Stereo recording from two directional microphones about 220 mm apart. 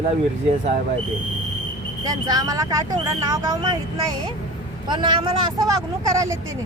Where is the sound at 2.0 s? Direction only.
15° right (ahead or behind).